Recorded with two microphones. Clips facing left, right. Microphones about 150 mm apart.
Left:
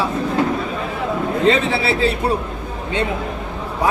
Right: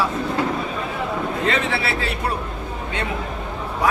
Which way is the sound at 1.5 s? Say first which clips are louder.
Left 7 dB; 25° left (ahead or behind).